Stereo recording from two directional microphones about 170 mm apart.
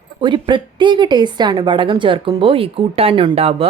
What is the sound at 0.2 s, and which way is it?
Speech, 30° right (ahead or behind).